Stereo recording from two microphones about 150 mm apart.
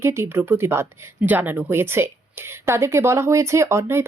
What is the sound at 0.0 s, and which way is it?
Speech, 15° right (ahead or behind).